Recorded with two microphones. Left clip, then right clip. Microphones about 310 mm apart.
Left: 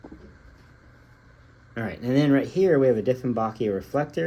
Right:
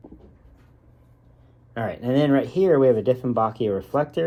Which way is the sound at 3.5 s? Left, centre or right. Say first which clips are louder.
Right 2 dB; right.